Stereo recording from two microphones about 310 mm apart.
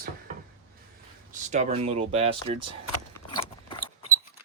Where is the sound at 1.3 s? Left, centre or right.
Right.